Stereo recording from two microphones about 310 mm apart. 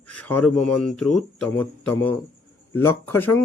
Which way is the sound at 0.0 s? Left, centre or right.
Centre.